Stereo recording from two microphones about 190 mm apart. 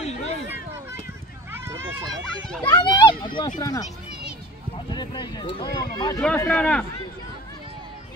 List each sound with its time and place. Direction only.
0.0 s a sound: 35° left (ahead or behind)
1.5 s run: 15° right (ahead or behind)
2.6 s children playing: 25° left (ahead or behind)
3.3 s speech: 25° left (ahead or behind)
4.9 s speech: 25° left (ahead or behind)
6.2 s speech: 5° left (ahead or behind)